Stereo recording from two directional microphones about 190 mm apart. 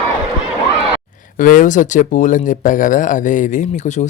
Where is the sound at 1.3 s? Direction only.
45° left (ahead or behind).